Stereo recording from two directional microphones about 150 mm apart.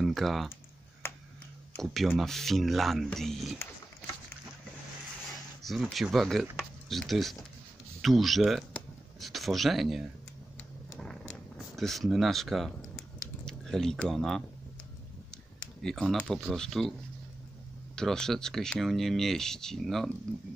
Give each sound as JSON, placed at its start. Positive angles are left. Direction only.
{"t": 0.0, "sound": "typing", "side_deg": 0}
{"t": 1.8, "sound": "speech", "side_deg": 0}
{"t": 5.6, "sound": "speech", "side_deg": 0}
{"t": 11.0, "sound": "a sound", "side_deg": 5}
{"t": 13.5, "sound": "speech", "side_deg": 5}
{"t": 17.9, "sound": "speech", "side_deg": 5}